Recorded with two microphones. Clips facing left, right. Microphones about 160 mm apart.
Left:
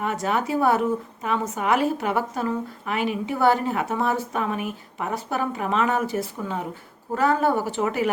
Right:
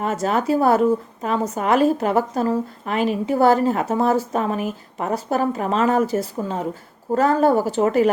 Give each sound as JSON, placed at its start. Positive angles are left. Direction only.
{"t": 0.0, "sound": "a woman's voice", "side_deg": -35}